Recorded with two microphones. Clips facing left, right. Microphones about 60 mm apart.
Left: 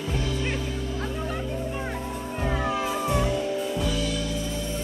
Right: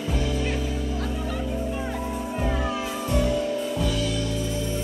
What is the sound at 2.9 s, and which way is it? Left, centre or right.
Music, centre.